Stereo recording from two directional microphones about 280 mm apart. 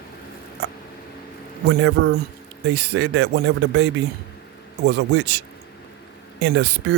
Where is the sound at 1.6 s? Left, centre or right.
Right.